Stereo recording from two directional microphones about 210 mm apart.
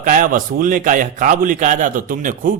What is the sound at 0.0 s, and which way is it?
A man's voice, 40° right (ahead or behind).